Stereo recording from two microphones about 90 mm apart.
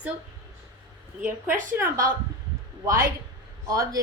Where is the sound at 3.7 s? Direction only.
40° right (ahead or behind).